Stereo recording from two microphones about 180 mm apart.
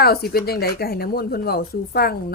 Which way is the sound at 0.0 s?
60° left (ahead or behind).